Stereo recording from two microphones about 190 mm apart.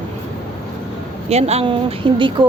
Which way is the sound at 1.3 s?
35° right (ahead or behind).